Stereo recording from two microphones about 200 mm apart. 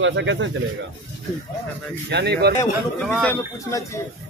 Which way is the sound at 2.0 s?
55° right (ahead or behind).